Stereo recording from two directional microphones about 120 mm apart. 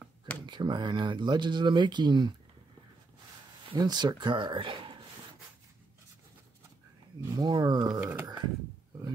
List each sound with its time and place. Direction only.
0.5 s speech: 40° right (ahead or behind)
3.7 s speech: 35° right (ahead or behind)
7.2 s speech: 35° right (ahead or behind)
8.0 s a sound: 15° right (ahead or behind)